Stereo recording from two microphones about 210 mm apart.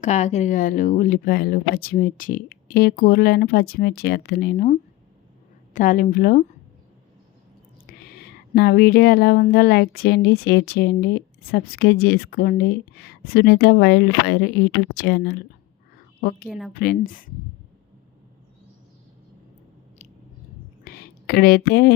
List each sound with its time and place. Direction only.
0.0 s speech: 35° left (ahead or behind)
7.9 s speech: 45° left (ahead or behind)
16.5 s a woman's voice: centre (ahead or behind)
16.7 s speech: 45° left (ahead or behind)
20.8 s a sound: 45° left (ahead or behind)